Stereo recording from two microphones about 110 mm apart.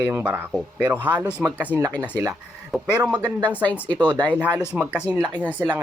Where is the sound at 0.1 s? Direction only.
15° right (ahead or behind).